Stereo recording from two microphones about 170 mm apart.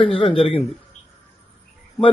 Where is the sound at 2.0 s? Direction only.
Centre (ahead or behind).